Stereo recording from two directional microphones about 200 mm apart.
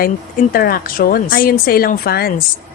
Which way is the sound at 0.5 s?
45° left (ahead or behind).